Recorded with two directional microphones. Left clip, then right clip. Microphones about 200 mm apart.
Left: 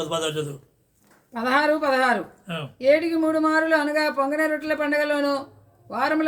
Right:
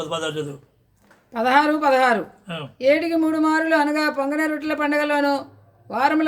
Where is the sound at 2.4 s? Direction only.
Centre (ahead or behind).